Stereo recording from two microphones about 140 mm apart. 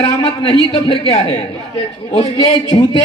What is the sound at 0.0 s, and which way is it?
A man's voice, 40° left (ahead or behind).